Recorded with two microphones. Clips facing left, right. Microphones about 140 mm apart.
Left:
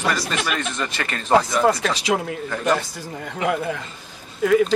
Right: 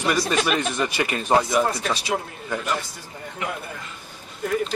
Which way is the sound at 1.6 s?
90° left.